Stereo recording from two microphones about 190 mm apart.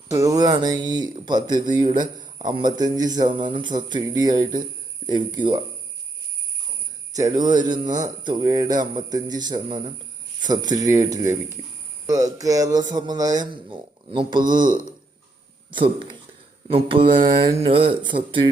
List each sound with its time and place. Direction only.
0.1 s speech: 15° right (ahead or behind)
7.2 s speech: 20° right (ahead or behind)